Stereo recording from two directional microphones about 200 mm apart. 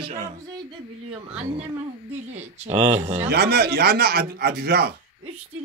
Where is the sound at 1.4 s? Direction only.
30° right (ahead or behind).